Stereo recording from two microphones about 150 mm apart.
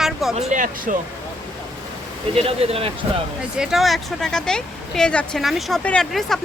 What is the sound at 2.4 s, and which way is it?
Speech, 40° right (ahead or behind).